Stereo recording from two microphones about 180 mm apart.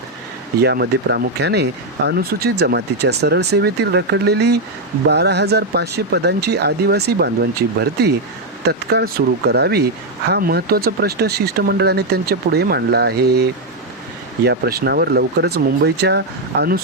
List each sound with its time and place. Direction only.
0.6 s speech: 70° right (ahead or behind)
8.6 s speech: 65° right (ahead or behind)